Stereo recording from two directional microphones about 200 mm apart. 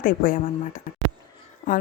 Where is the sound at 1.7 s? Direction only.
40° left (ahead or behind).